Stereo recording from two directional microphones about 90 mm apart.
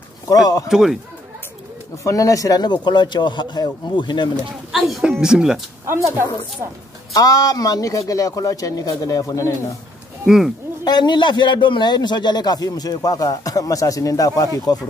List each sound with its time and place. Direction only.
0.3 s a man's voice: 45° left (ahead or behind)
0.7 s speech: 5° right (ahead or behind)
2.0 s speech: 40° left (ahead or behind); by 4.3 s 60° left (ahead or behind)
4.7 s speech: centre (ahead or behind)
5.9 s a woman's voice: 30° right (ahead or behind)
7.2 s a man's voice: 40° left (ahead or behind)
10.2 s speech: 5° right (ahead or behind)
10.8 s a man's voice: 55° left (ahead or behind)